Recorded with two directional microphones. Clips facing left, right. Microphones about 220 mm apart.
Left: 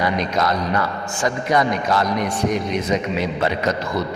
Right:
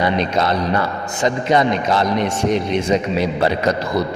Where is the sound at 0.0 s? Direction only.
25° right (ahead or behind).